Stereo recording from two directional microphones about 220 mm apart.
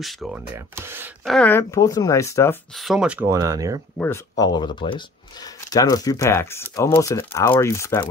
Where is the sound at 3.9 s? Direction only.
10° left (ahead or behind).